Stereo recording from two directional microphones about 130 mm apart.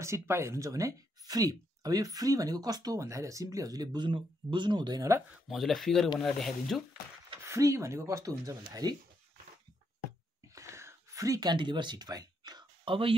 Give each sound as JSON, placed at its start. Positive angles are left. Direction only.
{"t": 0.0, "sound": "speech", "side_deg": -20}
{"t": 5.5, "sound": "speech", "side_deg": 0}
{"t": 7.4, "sound": "speech", "side_deg": -25}
{"t": 10.5, "sound": "a sound", "side_deg": -20}